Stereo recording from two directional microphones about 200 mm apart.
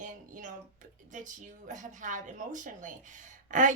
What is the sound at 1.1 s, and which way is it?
A woman's voice, 40° right (ahead or behind).